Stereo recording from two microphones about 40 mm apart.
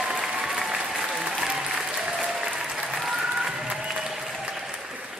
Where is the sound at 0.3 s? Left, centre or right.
Centre.